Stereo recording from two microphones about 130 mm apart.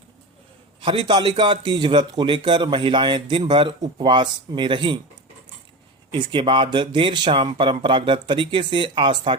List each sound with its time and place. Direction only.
0.8 s a man's voice: 40° right (ahead or behind)
6.1 s a man's voice: 35° right (ahead or behind)